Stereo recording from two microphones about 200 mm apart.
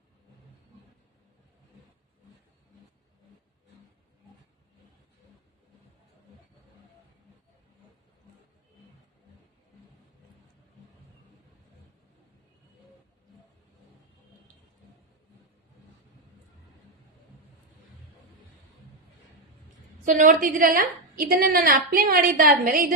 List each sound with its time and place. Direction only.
20.1 s a woman's voice: 40° right (ahead or behind)